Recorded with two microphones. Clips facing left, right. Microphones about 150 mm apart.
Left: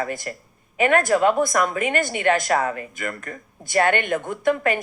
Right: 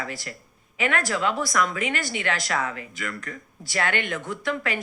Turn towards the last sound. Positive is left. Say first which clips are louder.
# left 7 dB
turn(degrees=50)  # may be behind; listen again after turning